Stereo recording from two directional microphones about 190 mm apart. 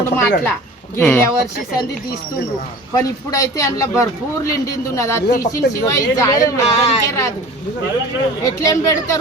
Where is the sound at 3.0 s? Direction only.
15° left (ahead or behind).